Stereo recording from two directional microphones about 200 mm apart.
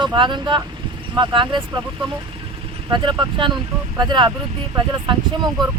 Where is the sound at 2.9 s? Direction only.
25° right (ahead or behind).